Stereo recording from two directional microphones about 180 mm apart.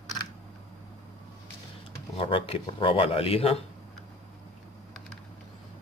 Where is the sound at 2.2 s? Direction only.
30° left (ahead or behind).